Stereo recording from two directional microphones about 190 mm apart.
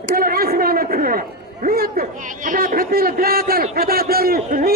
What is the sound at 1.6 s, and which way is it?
A man's voice, 50° right (ahead or behind).